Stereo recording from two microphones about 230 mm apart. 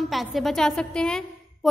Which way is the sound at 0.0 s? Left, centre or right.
Centre.